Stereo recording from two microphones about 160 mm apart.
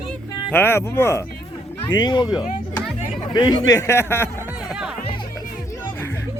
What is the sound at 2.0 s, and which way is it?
Music, 25° left (ahead or behind).